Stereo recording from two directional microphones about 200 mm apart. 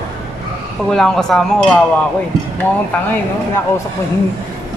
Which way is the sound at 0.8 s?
5° left (ahead or behind).